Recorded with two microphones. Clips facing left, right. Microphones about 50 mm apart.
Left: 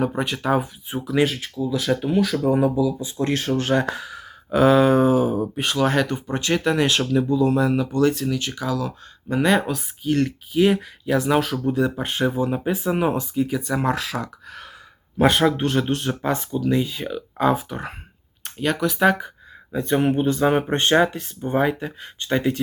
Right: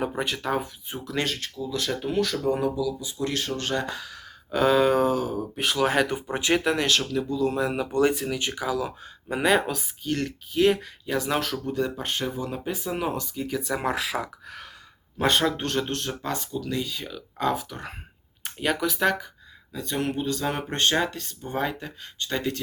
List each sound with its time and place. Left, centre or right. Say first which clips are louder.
0.0 s speech: left 4 dB; centre
2.6 s speech: left 6 dB; left; by 5.2 s centre
5.2 s speech: left 7 dB; centre
5.5 s speech: even; centre
6.8 s speech: left 5 dB; centre
7.5 s speech: left 6 dB; centre
7.9 s speech: left 3 dB; centre; by 13.2 s left
13.3 s speech: left 7 dB; centre
13.7 s speech: left 4 dB; centre
15.2 s speech: left 6 dB; centre
16.3 s speech: left 9 dB; left
18.4 s speech: left 3 dB; centre
18.9 s speech: left 6 dB; centre
19.7 s speech: left 8 dB; left